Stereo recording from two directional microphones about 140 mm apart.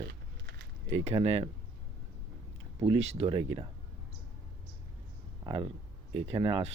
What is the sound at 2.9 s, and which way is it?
Speech, 45° right (ahead or behind).